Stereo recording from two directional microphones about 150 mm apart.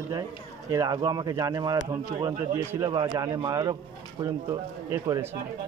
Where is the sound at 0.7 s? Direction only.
25° right (ahead or behind).